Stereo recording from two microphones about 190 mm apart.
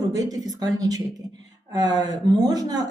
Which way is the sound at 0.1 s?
20° right (ahead or behind).